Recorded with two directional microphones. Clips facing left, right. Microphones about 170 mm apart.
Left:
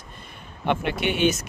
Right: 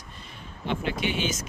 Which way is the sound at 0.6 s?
65° left (ahead or behind).